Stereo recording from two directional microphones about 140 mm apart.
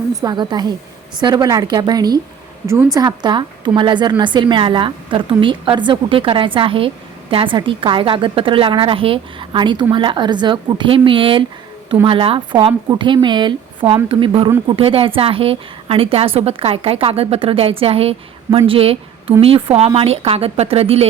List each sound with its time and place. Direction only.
0.1 s a woman's voice: 25° right (ahead or behind); by 21.1 s 45° right (ahead or behind)